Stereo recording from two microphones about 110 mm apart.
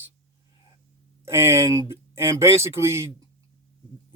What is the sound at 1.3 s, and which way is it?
Speech, 25° right (ahead or behind).